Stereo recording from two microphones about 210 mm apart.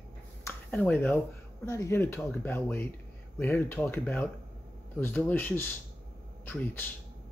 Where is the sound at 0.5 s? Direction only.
10° left (ahead or behind).